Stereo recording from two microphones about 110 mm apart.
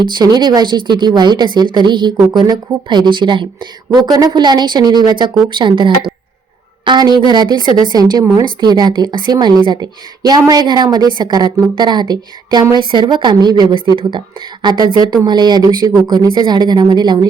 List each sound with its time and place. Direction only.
0.0 s speech: 40° right (ahead or behind)
8.2 s a woman's voice: 25° right (ahead or behind)
8.6 s speech: 40° right (ahead or behind)